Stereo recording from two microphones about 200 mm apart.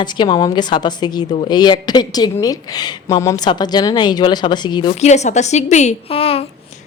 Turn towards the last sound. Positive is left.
turn(degrees=30)  # may be behind; listen again after turning